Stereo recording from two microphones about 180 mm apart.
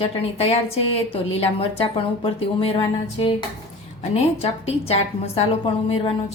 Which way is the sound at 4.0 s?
35° left (ahead or behind).